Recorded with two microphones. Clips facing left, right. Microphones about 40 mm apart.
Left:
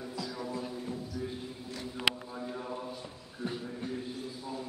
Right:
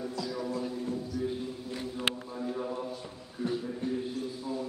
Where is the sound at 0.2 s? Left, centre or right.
Centre.